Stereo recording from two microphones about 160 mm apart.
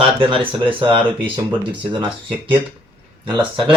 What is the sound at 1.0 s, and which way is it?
Speech, 10° right (ahead or behind).